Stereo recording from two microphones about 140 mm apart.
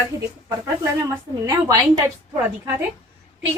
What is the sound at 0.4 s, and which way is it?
A woman's voice, 20° right (ahead or behind).